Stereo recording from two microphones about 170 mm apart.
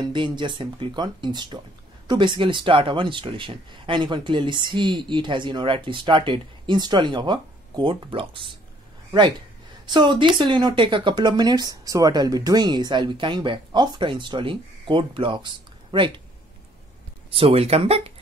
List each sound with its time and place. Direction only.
0.0 s speech: 30° right (ahead or behind)
9.8 s speech: 25° right (ahead or behind)
17.3 s speech: 35° right (ahead or behind)